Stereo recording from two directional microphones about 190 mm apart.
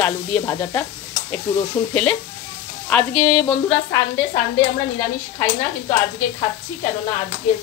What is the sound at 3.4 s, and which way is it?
Speech, 20° left (ahead or behind).